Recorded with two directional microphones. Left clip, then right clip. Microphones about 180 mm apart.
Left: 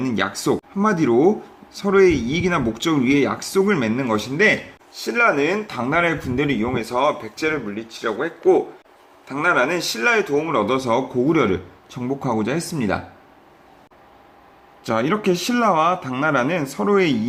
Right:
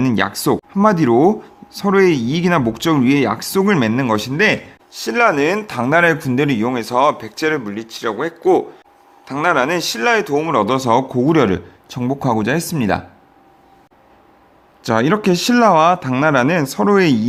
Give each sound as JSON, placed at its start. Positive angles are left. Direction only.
{"t": 0.0, "sound": "speech", "side_deg": -35}
{"t": 14.8, "sound": "speech", "side_deg": -35}